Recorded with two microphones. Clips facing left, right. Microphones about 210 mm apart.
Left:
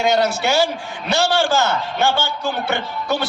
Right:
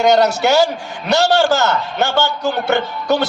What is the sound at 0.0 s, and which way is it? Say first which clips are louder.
A man's voice: right 5 dB; 45° right (ahead or behind).